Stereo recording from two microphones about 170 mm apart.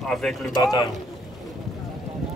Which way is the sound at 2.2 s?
Centre (ahead or behind).